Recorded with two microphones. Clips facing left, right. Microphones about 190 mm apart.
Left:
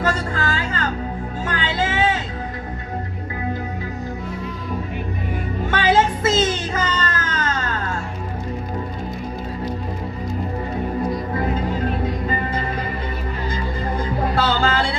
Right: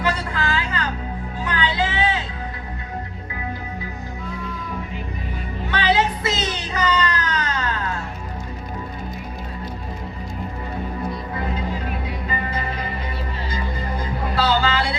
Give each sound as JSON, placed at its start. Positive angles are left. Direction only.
{"t": 0.0, "sound": "music", "side_deg": 45}
{"t": 5.7, "sound": "music", "side_deg": 45}
{"t": 14.3, "sound": "music", "side_deg": 50}